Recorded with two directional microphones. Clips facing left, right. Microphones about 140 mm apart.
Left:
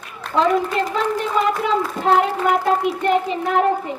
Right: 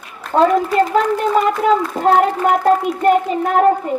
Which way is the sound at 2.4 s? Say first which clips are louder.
Right 4 dB; 45° right (ahead or behind).